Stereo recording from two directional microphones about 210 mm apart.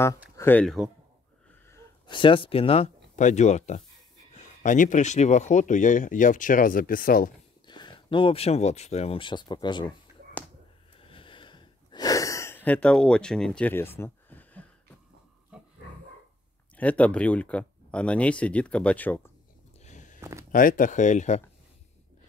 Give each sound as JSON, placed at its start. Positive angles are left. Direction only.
{"t": 0.4, "sound": "speech", "side_deg": 10}
{"t": 1.7, "sound": "speech", "side_deg": 20}
{"t": 7.6, "sound": "speech", "side_deg": 20}
{"t": 11.0, "sound": "a sound", "side_deg": 25}
{"t": 15.5, "sound": "pig", "side_deg": -5}
{"t": 16.7, "sound": "speech", "side_deg": 5}
{"t": 19.8, "sound": "walk", "side_deg": 35}
{"t": 20.2, "sound": "speech", "side_deg": -15}
{"t": 20.5, "sound": "speech", "side_deg": 40}